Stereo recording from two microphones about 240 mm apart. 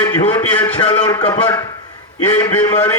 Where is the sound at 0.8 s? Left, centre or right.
Left.